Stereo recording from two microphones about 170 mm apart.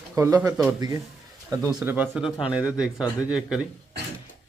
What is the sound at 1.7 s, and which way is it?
Speech, 5° right (ahead or behind).